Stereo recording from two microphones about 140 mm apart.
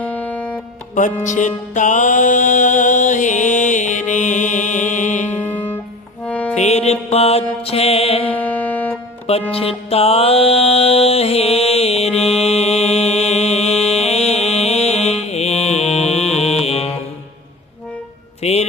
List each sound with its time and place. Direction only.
0.0 s music: 10° left (ahead or behind)
0.9 s music: 65° left (ahead or behind)
5.4 s music: 10° left (ahead or behind)
6.5 s music: 50° left (ahead or behind)
8.3 s music: 10° left (ahead or behind)
9.5 s music: 45° left (ahead or behind)
18.4 s music: 50° left (ahead or behind)